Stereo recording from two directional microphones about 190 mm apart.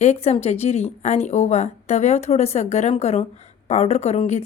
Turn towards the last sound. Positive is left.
turn(degrees=35)  # may be behind; listen again after turning